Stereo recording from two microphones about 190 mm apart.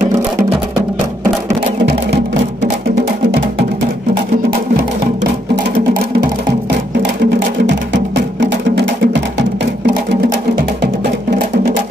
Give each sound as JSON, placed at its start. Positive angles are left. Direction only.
{"t": 7.0, "sound": "music", "side_deg": -65}